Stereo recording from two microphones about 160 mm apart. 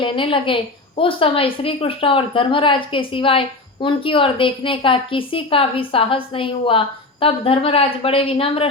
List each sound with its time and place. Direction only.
0.0 s a woman's voice: 35° left (ahead or behind)